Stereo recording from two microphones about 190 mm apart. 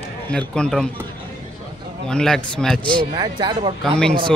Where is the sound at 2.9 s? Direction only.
20° right (ahead or behind).